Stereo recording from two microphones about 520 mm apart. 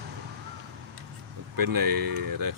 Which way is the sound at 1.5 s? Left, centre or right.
Right.